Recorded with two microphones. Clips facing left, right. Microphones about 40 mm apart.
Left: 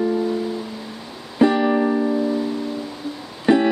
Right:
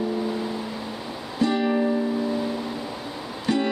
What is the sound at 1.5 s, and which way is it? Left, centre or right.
Music, centre.